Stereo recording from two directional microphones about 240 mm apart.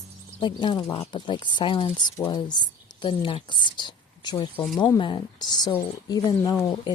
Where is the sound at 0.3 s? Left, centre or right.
Centre.